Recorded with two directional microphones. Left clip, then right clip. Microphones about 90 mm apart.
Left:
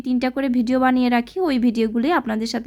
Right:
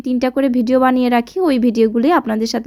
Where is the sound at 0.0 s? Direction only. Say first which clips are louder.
Right 6 dB; 35° right (ahead or behind).